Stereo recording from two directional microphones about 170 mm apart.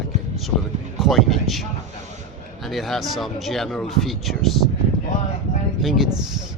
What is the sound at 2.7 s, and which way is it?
Speech, centre (ahead or behind).